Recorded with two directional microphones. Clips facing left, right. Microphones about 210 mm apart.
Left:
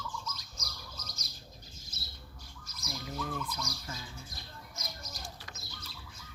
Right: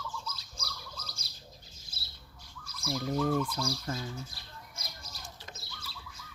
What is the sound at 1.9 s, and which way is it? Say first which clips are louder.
Squawk: left 4 dB; 30° right (ahead or behind).